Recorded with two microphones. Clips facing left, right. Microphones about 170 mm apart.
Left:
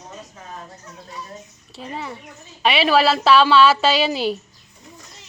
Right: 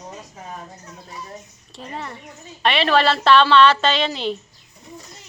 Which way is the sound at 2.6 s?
5° left (ahead or behind).